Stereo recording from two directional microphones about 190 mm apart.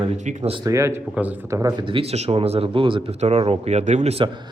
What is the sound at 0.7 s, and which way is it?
Speech, 15° right (ahead or behind).